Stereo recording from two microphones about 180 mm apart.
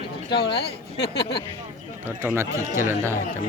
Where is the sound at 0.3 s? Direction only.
30° left (ahead or behind).